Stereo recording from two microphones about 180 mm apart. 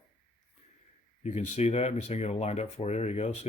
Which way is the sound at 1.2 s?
40° left (ahead or behind).